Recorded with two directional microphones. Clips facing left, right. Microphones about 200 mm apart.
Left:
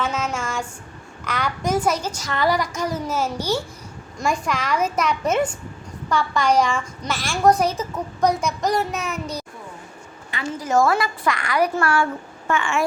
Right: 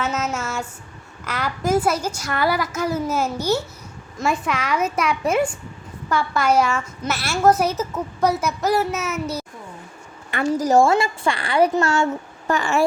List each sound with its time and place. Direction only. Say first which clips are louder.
0.0 s a woman's voice: right 1 dB; 5° right (ahead or behind)
10.5 s a woman's voice: right 3 dB; 35° right (ahead or behind)
12.5 s speech: right 2 dB; 40° right (ahead or behind)